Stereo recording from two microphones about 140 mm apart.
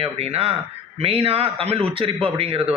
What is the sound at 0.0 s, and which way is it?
A man's voice, 45° right (ahead or behind).